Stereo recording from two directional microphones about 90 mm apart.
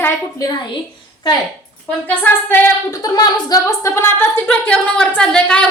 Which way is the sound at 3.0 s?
45° left (ahead or behind).